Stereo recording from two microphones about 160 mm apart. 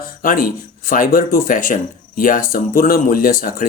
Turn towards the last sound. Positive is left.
turn(degrees=65)  # may be behind; listen again after turning